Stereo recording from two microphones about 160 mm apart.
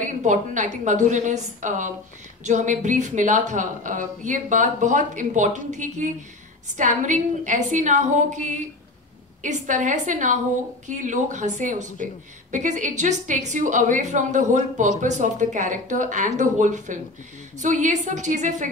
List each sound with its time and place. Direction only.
0.0 s a woman's voice: 50° right (ahead or behind)